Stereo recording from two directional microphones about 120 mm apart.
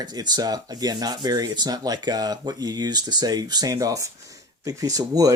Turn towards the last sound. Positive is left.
turn(degrees=-30)  # may be behind; listen again after turning